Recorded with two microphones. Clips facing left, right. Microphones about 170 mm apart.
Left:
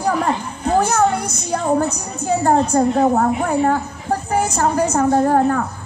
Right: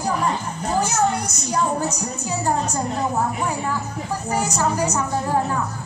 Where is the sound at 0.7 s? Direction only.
55° left (ahead or behind).